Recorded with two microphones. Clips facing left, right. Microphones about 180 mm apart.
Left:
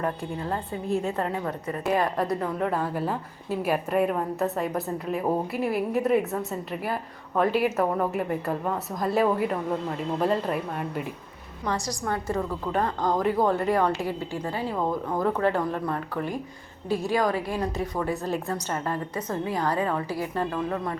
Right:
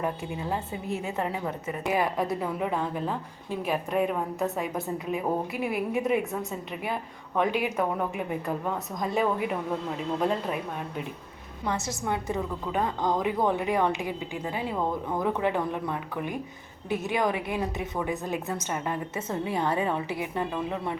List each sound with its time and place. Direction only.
0.0 s a woman's voice: 5° right (ahead or behind)
2.8 s a woman's voice: 5° left (ahead or behind)
11.7 s a woman's voice: 20° right (ahead or behind)
15.2 s a woman's voice: 15° right (ahead or behind)